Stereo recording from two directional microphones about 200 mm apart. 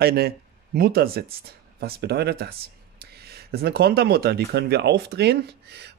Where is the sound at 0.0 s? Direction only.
50° right (ahead or behind).